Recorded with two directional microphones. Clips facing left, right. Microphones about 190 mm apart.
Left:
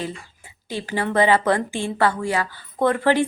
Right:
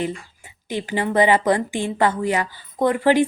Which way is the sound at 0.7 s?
15° right (ahead or behind).